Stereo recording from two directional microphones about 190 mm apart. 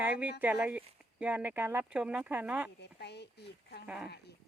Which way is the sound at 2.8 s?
60° left (ahead or behind).